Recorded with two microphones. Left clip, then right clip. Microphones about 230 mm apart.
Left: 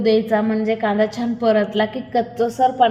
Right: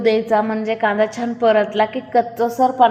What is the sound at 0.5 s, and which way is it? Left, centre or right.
Speech, right.